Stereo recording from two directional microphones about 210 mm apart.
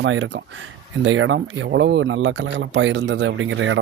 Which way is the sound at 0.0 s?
65° right (ahead or behind).